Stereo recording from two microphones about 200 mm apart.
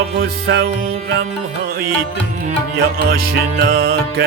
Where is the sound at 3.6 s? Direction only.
45° right (ahead or behind).